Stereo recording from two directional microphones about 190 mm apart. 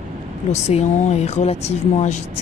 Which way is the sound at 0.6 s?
35° left (ahead or behind).